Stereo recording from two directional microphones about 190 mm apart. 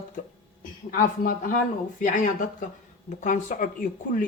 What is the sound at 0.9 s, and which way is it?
A woman's voice, 45° left (ahead or behind).